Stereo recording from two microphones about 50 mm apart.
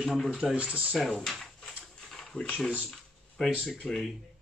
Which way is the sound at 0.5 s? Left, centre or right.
Right.